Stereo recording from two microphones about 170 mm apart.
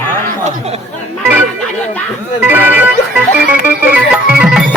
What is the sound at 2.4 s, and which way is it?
Speech, 10° right (ahead or behind).